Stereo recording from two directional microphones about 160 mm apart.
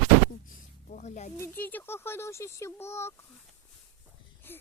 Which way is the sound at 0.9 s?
50° left (ahead or behind).